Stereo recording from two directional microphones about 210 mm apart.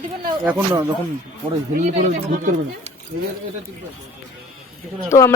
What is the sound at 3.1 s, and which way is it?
Speech, 50° right (ahead or behind).